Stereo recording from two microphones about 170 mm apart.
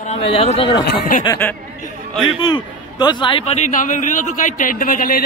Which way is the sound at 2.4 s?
25° left (ahead or behind).